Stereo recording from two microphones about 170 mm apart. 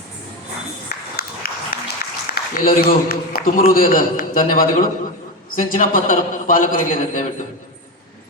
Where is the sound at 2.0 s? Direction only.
55° left (ahead or behind).